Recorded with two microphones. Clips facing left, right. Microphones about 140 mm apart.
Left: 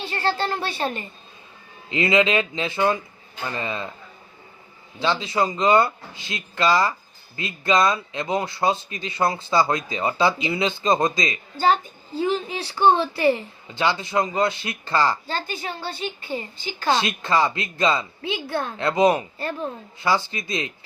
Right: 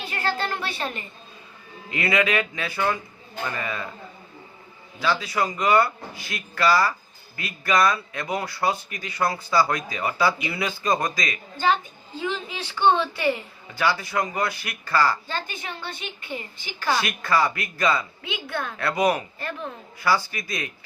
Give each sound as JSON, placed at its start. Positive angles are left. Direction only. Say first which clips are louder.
{"t": 0.0, "sound": "speech", "louder": "left 3 dB", "side_deg": 30}
{"t": 1.9, "sound": "a woman's voice", "louder": "left 4 dB", "side_deg": 20}
{"t": 4.9, "sound": "a woman's voice", "louder": "left 2 dB", "side_deg": 25}
{"t": 11.6, "sound": "a woman's voice", "louder": "left 3 dB", "side_deg": 35}